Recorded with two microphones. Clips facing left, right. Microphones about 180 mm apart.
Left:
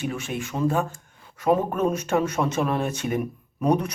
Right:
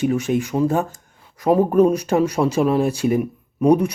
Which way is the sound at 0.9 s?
35° right (ahead or behind).